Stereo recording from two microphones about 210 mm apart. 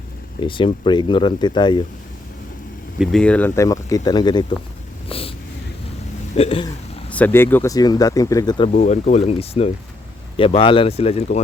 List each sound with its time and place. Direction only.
0.3 s speech: 25° left (ahead or behind)
3.0 s speech: centre (ahead or behind); by 4.5 s 20° left (ahead or behind)
5.0 s a sound: 25° left (ahead or behind)
6.3 s speech: 25° left (ahead or behind)
7.1 s speech: 10° left (ahead or behind)
8.7 s speech: 40° left (ahead or behind)